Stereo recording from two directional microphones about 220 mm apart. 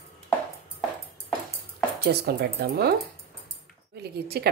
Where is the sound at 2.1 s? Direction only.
45° right (ahead or behind).